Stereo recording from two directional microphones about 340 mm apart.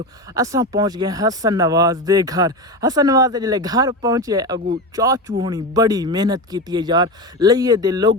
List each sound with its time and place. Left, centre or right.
0.3 s speech: centre